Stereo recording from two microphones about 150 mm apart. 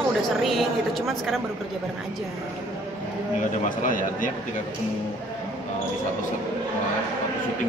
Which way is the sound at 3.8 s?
60° left (ahead or behind).